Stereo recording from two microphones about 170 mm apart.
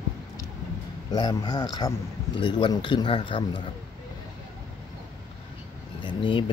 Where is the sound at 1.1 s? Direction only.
20° left (ahead or behind).